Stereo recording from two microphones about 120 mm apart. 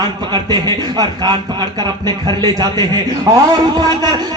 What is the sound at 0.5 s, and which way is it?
A man's voice, 35° right (ahead or behind).